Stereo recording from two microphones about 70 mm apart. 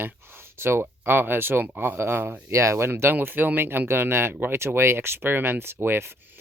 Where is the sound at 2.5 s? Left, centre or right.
Right.